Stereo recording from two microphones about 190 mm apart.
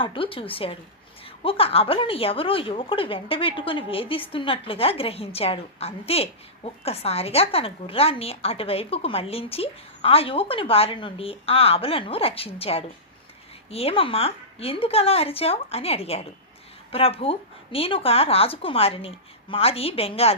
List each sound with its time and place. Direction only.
0.0 s a woman's voice: 30° left (ahead or behind)